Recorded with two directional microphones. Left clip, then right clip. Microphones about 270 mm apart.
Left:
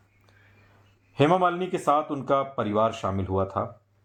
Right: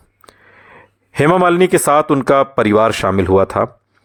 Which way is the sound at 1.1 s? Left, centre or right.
Right.